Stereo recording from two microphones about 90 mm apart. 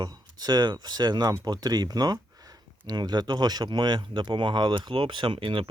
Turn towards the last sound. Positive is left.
turn(degrees=-70)  # may be behind; listen again after turning